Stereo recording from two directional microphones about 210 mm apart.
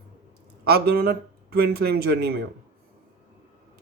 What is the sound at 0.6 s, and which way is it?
Speech, 50° right (ahead or behind).